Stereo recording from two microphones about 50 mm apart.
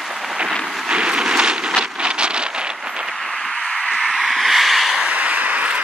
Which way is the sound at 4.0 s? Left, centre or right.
Centre.